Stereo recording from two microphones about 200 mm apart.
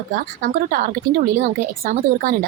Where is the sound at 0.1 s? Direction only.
45° right (ahead or behind).